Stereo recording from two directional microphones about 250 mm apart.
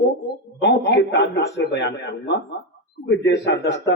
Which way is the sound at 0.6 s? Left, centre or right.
Left.